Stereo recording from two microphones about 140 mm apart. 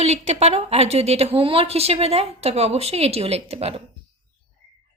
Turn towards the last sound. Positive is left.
turn(degrees=-45)  # may be behind; listen again after turning